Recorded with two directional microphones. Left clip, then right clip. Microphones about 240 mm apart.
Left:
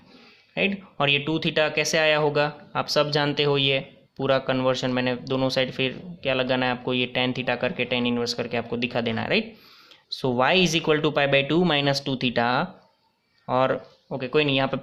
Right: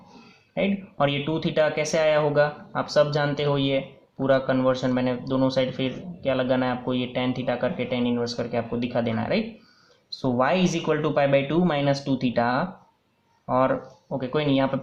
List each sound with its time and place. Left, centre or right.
0.5 s speech: left